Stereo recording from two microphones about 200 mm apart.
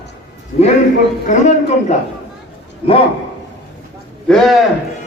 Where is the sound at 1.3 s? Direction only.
35° left (ahead or behind).